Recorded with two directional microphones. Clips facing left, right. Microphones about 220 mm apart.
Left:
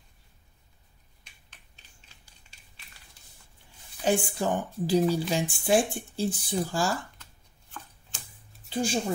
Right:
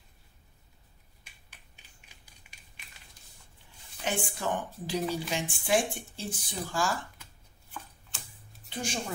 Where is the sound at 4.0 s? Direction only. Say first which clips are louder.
Left 7 dB; 35° left (ahead or behind).